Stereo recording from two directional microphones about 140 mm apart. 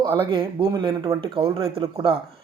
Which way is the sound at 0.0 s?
35° right (ahead or behind).